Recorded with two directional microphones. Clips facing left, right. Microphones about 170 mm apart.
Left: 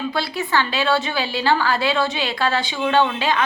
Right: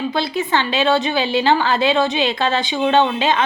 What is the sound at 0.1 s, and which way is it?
Speech, 20° right (ahead or behind).